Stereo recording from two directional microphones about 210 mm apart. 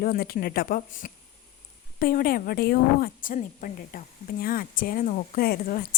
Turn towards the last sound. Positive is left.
turn(degrees=45)  # may be behind; listen again after turning